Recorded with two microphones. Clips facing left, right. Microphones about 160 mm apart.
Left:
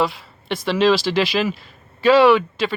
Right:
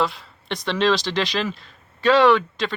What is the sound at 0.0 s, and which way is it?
Speech, 5° left (ahead or behind).